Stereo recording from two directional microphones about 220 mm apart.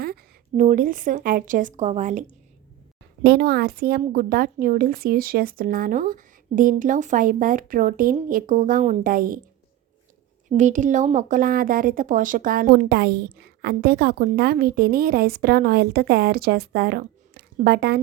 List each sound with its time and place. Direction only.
0.0 s speech: 45° right (ahead or behind)
3.2 s speech: 45° right (ahead or behind)
10.6 s a woman's voice: 35° right (ahead or behind)